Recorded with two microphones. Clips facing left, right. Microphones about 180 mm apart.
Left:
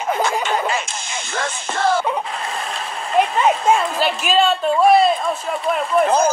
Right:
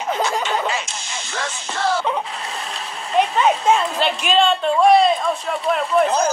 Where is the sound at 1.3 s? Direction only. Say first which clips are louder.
Left 3 dB; 50° left (ahead or behind).